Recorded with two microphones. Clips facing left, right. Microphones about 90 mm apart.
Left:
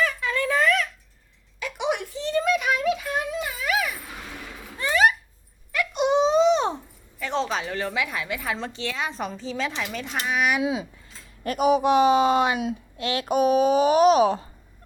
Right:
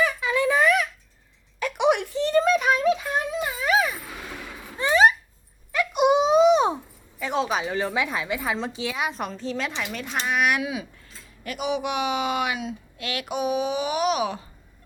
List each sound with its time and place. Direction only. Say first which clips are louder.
0.0 s a sound: right 2 dB; 15° right (ahead or behind)
1.5 s a sound: right 5 dB; 60° right (ahead or behind)
2.4 s a sound: right 1 dB; 35° right (ahead or behind); by 6.7 s 15° right (ahead or behind)
7.2 s speech: right 1 dB; 15° right (ahead or behind)
8.5 s speech: right 2 dB; 10° right (ahead or behind)
9.4 s speech: even; centre (ahead or behind)
10.6 s speech: left 4 dB; 25° left (ahead or behind)
11.4 s a child's voice: left 7 dB; 40° left (ahead or behind)
13.2 s a child's voice: left 6 dB; 45° left (ahead or behind)